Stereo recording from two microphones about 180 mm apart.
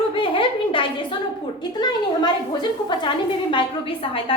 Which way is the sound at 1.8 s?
25° left (ahead or behind).